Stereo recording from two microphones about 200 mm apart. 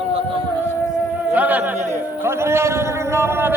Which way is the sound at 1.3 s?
10° right (ahead or behind).